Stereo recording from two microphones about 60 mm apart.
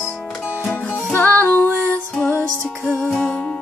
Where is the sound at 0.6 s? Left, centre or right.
Left.